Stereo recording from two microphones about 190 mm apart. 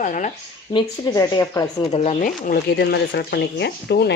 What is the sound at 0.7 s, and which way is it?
Speech, 20° left (ahead or behind).